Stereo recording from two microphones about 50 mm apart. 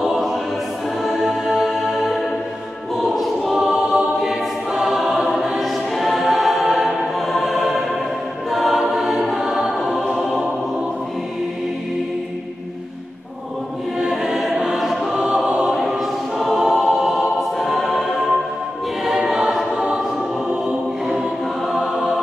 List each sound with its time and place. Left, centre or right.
0.0 s choir: centre
1.0 s music: centre
3.0 s choir: centre
3.5 s choir: centre
14.1 s choir: centre
15.1 s choir: centre
15.7 s choir: centre
19.3 s choir: centre